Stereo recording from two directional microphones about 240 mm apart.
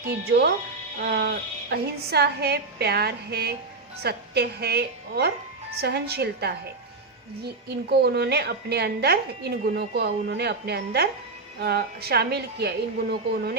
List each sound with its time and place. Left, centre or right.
0.0 s a woman's voice: right